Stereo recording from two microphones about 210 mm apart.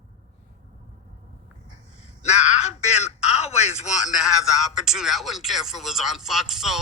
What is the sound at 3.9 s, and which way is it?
Speech, centre (ahead or behind).